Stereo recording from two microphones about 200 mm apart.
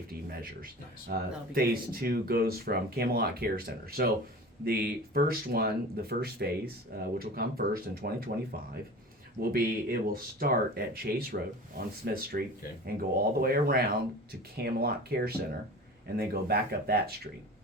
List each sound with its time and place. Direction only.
1.1 s speech: 50° right (ahead or behind)